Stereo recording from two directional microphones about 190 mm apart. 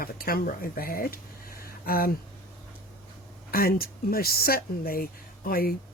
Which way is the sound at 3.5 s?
50° left (ahead or behind).